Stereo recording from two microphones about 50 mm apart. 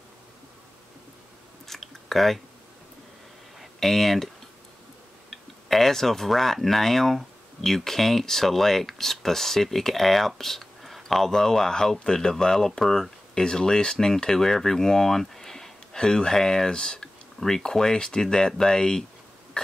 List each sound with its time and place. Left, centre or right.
1.7 s chewing: centre
3.8 s speech: centre
5.3 s speech: centre
19.6 s a sound: centre